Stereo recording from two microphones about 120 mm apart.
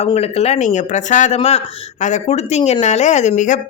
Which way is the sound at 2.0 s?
90° left.